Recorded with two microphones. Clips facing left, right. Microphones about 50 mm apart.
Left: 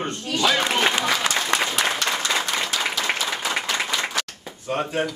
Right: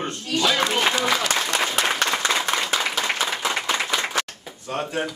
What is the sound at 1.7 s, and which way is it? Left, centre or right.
Applause, right.